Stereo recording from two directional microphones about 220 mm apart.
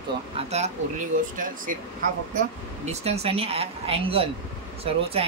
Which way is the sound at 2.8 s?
30° right (ahead or behind).